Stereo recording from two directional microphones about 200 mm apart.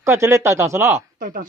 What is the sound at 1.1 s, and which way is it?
Speech, 40° right (ahead or behind).